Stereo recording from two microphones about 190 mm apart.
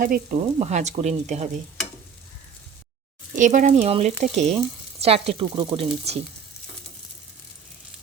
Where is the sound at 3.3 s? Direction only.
40° right (ahead or behind).